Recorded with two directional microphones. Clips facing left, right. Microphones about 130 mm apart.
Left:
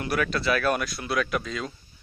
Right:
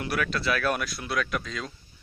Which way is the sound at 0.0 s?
Centre (ahead or behind).